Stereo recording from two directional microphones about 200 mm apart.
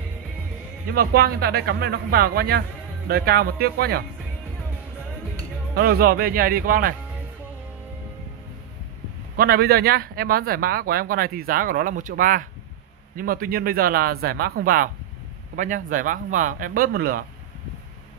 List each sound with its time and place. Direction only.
0.9 s speech: 50° right (ahead or behind)
5.8 s speech: 50° right (ahead or behind)
9.4 s speech: 50° right (ahead or behind)